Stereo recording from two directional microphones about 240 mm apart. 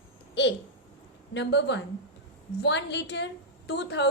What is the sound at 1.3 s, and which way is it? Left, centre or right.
A woman's voice, left.